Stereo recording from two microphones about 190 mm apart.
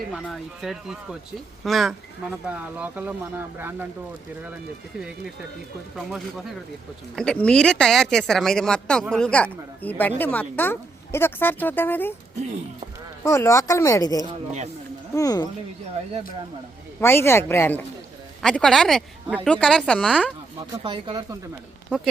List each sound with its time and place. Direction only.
0.1 s speech: centre (ahead or behind)
6.1 s a woman's voice: centre (ahead or behind)
13.2 s a woman's voice: 15° left (ahead or behind)
17.0 s a woman's voice: 15° left (ahead or behind)
20.8 s speech: 25° right (ahead or behind)
21.8 s speech: centre (ahead or behind)